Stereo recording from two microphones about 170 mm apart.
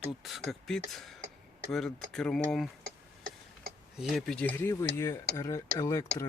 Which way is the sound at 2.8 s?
60° right (ahead or behind).